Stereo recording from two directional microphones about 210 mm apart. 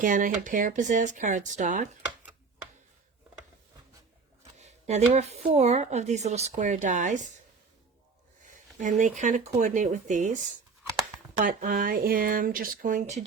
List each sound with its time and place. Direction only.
0.0 s speech: 40° right (ahead or behind)
4.5 s speech: 35° right (ahead or behind)
9.0 s speech: 35° right (ahead or behind)
11.4 s speech: 40° right (ahead or behind)